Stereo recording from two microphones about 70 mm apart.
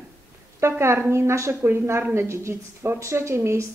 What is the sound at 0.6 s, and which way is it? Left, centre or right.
Speech, right.